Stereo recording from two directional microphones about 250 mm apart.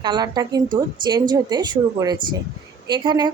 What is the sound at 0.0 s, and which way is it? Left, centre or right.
A woman's voice, centre.